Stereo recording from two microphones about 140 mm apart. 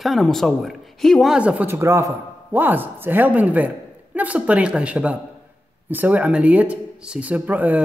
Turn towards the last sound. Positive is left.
turn(degrees=-10)  # may be behind; listen again after turning